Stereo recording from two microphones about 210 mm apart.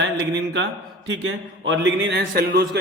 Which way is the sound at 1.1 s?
65° right (ahead or behind).